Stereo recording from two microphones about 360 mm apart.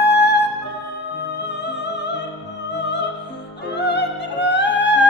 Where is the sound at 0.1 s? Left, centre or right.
Left.